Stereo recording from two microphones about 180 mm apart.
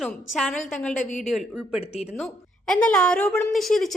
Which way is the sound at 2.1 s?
5° left (ahead or behind).